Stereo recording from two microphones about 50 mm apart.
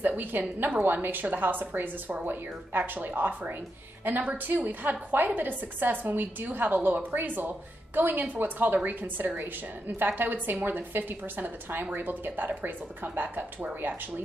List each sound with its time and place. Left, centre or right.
0.0 s a woman's voice: right